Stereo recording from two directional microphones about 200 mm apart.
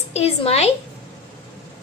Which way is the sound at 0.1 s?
30° left (ahead or behind).